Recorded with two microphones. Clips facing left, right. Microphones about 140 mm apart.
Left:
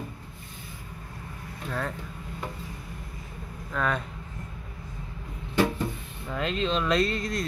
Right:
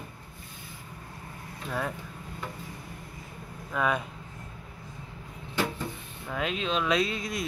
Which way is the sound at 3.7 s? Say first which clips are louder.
Right 1 dB; 5° right (ahead or behind).